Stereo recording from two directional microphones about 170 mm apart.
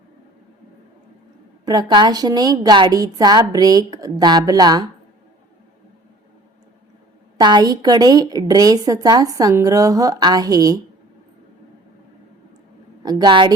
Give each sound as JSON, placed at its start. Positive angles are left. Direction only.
{"t": 1.6, "sound": "a woman's voice", "side_deg": -25}
{"t": 7.3, "sound": "a woman's voice", "side_deg": -25}
{"t": 13.0, "sound": "a woman's voice", "side_deg": -20}